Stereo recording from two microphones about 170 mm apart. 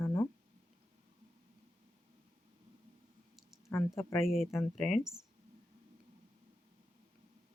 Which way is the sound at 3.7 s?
15° left (ahead or behind).